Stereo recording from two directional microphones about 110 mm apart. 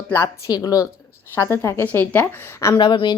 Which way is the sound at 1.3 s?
25° left (ahead or behind).